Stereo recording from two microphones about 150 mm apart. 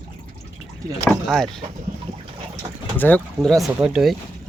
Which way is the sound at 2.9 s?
10° left (ahead or behind).